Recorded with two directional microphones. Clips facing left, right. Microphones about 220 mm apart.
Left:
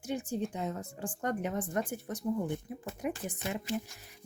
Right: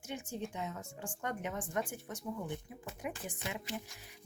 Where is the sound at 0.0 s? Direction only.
35° left (ahead or behind).